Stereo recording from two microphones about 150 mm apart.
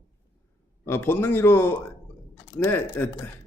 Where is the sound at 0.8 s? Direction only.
15° left (ahead or behind).